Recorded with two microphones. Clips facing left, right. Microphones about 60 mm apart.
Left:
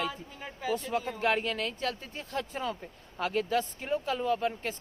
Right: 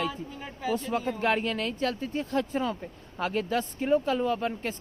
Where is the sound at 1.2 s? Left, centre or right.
Right.